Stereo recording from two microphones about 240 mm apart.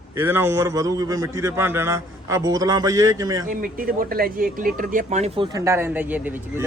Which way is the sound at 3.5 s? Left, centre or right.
Right.